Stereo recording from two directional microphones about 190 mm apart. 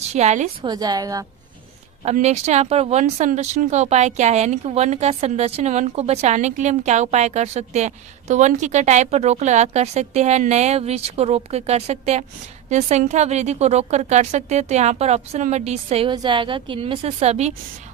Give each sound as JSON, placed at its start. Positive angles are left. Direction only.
{"t": 0.1, "sound": "speech", "side_deg": -35}
{"t": 0.6, "sound": "a woman's voice", "side_deg": -20}
{"t": 2.0, "sound": "speech", "side_deg": -35}